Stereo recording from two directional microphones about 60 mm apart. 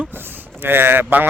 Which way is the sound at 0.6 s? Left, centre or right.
Right.